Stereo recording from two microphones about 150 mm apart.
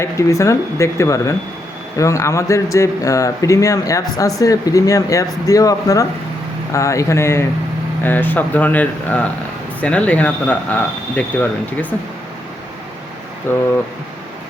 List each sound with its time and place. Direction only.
0.0 s speech: 20° left (ahead or behind)
13.5 s speech: 15° left (ahead or behind)